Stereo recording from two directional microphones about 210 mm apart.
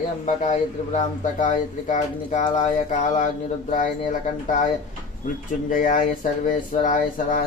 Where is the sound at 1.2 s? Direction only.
35° left (ahead or behind).